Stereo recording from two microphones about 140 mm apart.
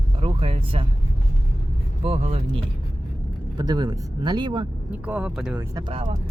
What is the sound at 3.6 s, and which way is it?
Speech, 30° right (ahead or behind).